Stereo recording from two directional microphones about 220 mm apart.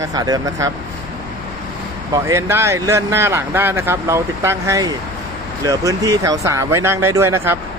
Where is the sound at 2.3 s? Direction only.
10° right (ahead or behind).